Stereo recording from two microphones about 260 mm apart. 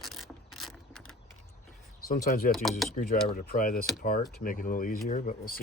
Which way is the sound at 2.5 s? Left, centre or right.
Centre.